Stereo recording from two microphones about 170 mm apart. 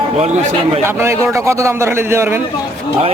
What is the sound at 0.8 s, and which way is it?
Speech, 15° right (ahead or behind).